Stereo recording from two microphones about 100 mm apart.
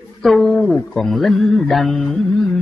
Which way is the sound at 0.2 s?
Centre (ahead or behind).